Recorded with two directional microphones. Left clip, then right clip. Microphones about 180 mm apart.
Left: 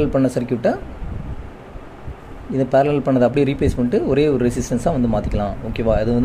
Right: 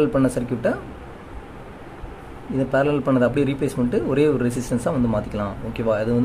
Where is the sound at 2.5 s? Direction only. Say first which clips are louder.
Left 4 dB; 15° left (ahead or behind).